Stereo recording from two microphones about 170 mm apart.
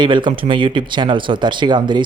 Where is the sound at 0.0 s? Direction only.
25° right (ahead or behind).